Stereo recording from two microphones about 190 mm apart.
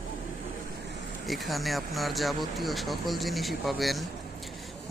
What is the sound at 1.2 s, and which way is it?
Speech, centre (ahead or behind).